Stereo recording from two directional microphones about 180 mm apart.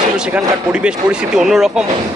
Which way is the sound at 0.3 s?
5° right (ahead or behind).